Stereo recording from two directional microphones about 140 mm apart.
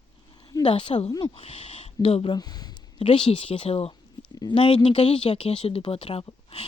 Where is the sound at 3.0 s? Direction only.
40° left (ahead or behind).